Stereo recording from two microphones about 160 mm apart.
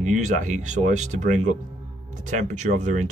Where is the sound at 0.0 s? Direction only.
50° right (ahead or behind).